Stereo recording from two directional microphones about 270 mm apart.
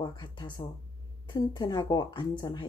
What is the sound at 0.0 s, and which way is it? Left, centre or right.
Speech, centre.